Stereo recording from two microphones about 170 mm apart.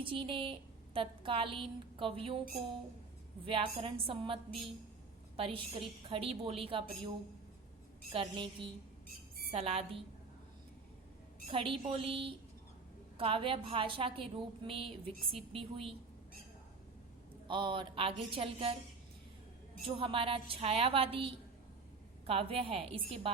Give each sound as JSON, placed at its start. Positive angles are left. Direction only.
{"t": 0.0, "sound": "a woman's voice", "side_deg": -30}
{"t": 3.4, "sound": "a woman's voice", "side_deg": -30}
{"t": 5.4, "sound": "a woman's voice", "side_deg": -35}
{"t": 11.5, "sound": "a woman's voice", "side_deg": -30}
{"t": 17.5, "sound": "a woman's voice", "side_deg": -30}
{"t": 19.8, "sound": "a woman's voice", "side_deg": -30}